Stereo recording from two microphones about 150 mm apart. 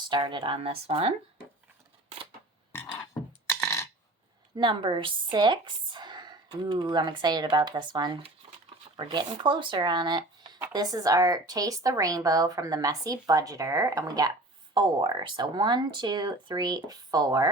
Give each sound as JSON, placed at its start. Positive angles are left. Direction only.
{"t": 0.1, "sound": "speech", "side_deg": -30}
{"t": 3.5, "sound": "a sound", "side_deg": 15}
{"t": 4.5, "sound": "speech", "side_deg": -30}